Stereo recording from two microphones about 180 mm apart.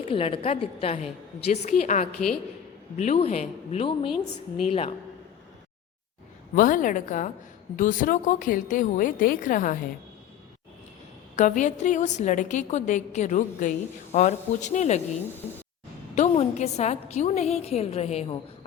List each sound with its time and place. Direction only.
0.1 s a woman's voice: 30° left (ahead or behind)
6.6 s a woman's voice: 50° left (ahead or behind)
11.3 s a woman's voice: 45° left (ahead or behind)
16.1 s a woman's voice: 35° left (ahead or behind)